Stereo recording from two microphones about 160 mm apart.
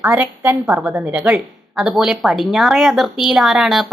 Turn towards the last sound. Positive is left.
turn(degrees=0)  # may be behind; listen again after turning